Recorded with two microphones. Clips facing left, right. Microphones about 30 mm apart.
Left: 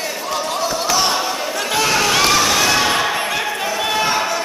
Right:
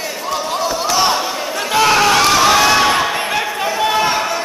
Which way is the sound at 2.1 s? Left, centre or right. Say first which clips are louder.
Right 2 dB; centre.